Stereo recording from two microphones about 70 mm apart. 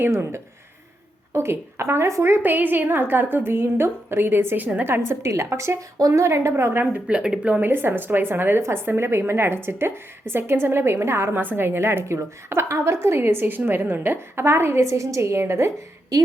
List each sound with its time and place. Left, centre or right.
0.0 s a woman's voice: right
7.1 s speech: centre
7.6 s a woman's voice: right